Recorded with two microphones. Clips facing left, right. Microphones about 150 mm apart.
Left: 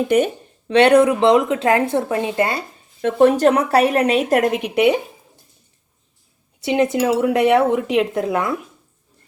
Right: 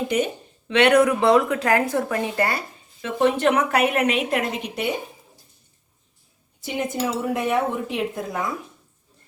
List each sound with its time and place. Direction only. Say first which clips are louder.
0.1 s speech: left 7 dB; 55° left (ahead or behind)
0.7 s a woman's voice: left 4 dB; 30° left (ahead or behind)
3.0 s speech: left 6 dB; 45° left (ahead or behind); by 4.9 s 70° left (ahead or behind)
6.6 s speech: left 8 dB; 80° left